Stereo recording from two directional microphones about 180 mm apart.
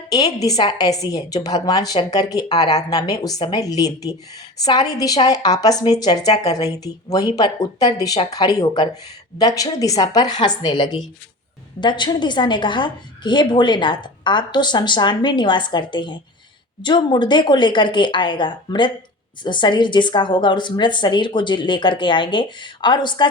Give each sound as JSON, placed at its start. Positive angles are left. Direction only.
{"t": 0.1, "sound": "a woman's voice", "side_deg": 20}